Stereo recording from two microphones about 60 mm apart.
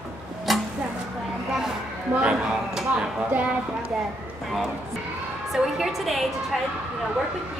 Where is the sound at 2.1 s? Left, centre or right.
Right.